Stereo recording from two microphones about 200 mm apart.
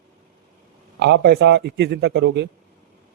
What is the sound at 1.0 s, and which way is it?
A man's voice, 55° right (ahead or behind).